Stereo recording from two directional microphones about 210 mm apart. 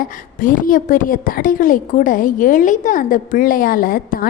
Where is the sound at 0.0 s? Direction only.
40° left (ahead or behind).